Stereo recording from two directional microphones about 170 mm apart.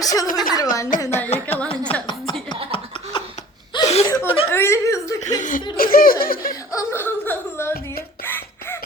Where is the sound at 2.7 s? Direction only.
30° left (ahead or behind).